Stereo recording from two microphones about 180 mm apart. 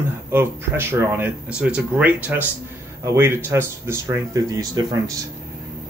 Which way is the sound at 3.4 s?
15° right (ahead or behind).